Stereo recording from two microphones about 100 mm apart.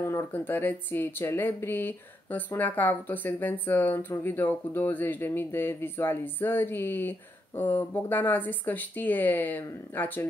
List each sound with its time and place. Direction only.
0.0 s speech: 20° left (ahead or behind)